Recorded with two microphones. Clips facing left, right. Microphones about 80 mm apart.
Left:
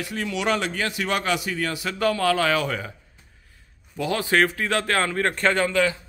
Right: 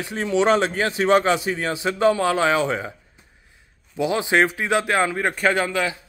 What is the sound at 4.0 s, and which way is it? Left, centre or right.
A man's voice, centre.